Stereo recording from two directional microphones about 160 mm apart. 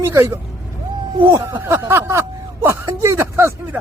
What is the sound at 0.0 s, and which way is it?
Speech, 15° right (ahead or behind).